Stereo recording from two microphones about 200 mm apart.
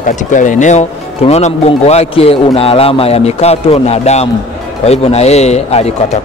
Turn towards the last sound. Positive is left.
turn(degrees=30)  # may be behind; listen again after turning